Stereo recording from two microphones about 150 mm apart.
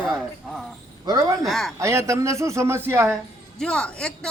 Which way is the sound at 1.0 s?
25° right (ahead or behind).